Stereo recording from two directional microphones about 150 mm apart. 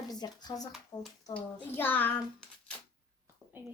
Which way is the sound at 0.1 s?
25° left (ahead or behind).